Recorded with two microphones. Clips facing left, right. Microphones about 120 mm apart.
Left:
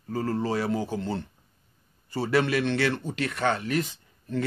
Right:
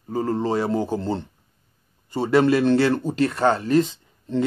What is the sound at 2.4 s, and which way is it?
Speech, 35° right (ahead or behind).